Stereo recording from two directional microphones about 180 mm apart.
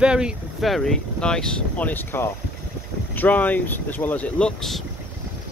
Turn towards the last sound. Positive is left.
turn(degrees=0)  # may be behind; listen again after turning